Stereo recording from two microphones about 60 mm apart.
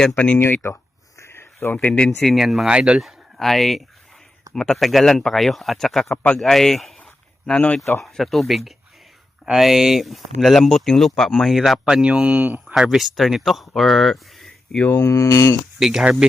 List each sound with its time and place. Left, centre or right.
0.3 s speech: left
1.2 s a sound: left
1.7 s speech: left
2.0 s speech: centre
2.6 s speech: centre
3.0 s speech: centre
6.4 s a sound: centre
8.0 s speech: centre
12.3 s speech: right
12.6 s speech: centre
14.9 s speech: left
15.8 s speech: centre